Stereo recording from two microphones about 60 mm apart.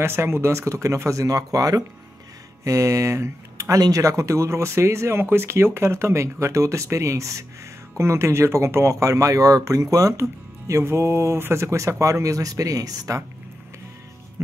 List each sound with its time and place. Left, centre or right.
0.0 s speech: right
2.6 s speech: right